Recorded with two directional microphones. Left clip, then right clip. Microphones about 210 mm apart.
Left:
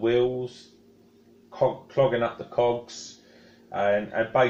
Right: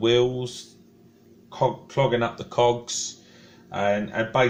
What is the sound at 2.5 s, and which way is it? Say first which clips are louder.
Speech: right 4 dB; 40° right (ahead or behind).